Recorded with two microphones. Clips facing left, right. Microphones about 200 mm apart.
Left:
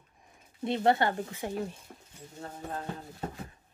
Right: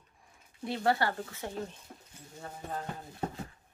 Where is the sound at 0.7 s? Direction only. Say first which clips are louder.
Left 4 dB; 20° left (ahead or behind).